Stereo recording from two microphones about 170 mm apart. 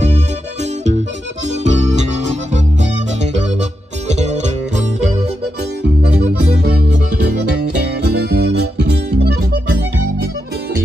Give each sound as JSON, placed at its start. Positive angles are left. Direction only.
{"t": 1.5, "sound": "music", "side_deg": -45}
{"t": 4.1, "sound": "music", "side_deg": -40}
{"t": 6.6, "sound": "music", "side_deg": -70}